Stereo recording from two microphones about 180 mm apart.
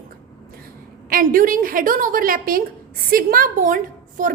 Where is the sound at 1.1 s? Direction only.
50° right (ahead or behind).